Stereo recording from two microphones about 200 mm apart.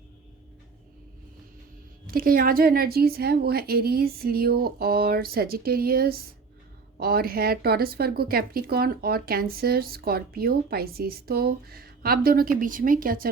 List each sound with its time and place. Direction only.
2.0 s a woman's voice: 45° right (ahead or behind)